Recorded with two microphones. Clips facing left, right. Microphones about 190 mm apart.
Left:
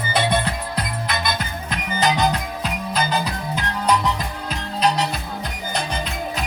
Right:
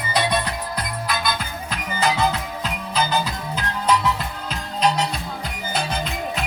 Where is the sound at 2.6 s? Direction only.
10° left (ahead or behind).